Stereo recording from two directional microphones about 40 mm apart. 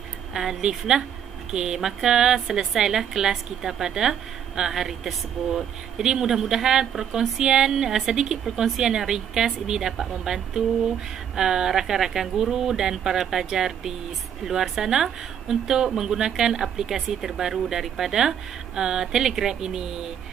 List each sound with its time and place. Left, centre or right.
0.3 s a woman's voice: centre